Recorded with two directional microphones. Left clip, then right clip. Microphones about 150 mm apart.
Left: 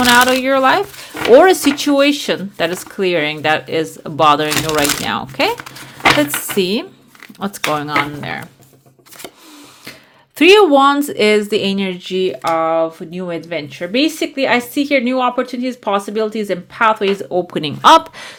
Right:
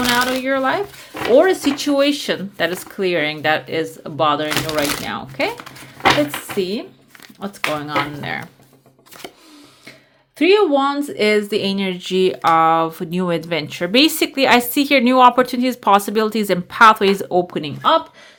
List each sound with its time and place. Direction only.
0.0 s speech: 40° left (ahead or behind)
1.7 s speech: 25° left (ahead or behind)
6.6 s speech: 35° left (ahead or behind)
7.9 s speech: 10° left (ahead or behind)
10.3 s speech: 45° left (ahead or behind); by 11.9 s 15° left (ahead or behind)
11.9 s speech: centre (ahead or behind)
12.1 s speech: 15° right (ahead or behind)
12.5 s speech: 25° right (ahead or behind)
17.4 s speech: 15° left (ahead or behind)